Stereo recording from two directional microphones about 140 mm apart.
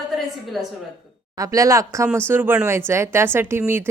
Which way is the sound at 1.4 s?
25° right (ahead or behind).